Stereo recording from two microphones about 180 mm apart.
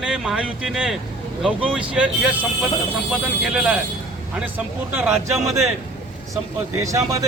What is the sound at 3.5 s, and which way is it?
Speech, 5° right (ahead or behind).